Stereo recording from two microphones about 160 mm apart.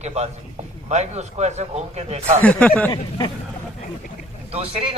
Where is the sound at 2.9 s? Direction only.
30° left (ahead or behind).